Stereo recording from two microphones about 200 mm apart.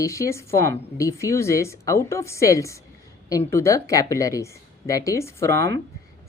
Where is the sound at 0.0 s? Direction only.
15° left (ahead or behind).